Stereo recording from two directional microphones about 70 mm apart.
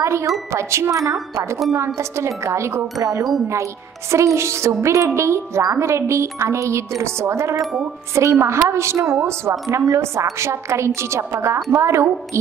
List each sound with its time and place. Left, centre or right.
0.0 s a woman's voice: right